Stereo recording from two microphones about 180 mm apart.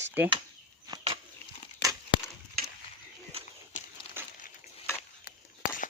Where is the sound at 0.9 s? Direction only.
30° right (ahead or behind).